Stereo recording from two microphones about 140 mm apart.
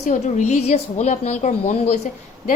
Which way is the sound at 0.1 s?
60° left (ahead or behind).